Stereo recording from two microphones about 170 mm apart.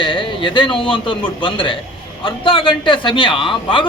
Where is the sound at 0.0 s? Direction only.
30° left (ahead or behind).